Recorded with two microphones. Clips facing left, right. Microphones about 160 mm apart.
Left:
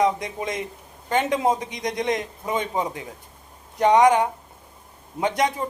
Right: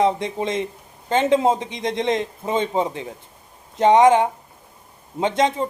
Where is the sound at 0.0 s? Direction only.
25° right (ahead or behind).